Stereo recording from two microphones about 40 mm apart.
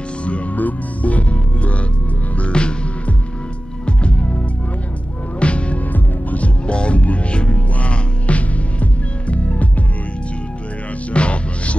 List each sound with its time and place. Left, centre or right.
0.6 s music: left
5.4 s music: left
11.1 s music: left